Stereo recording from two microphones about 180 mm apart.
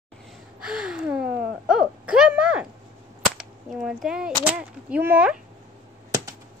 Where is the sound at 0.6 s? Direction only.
5° right (ahead or behind).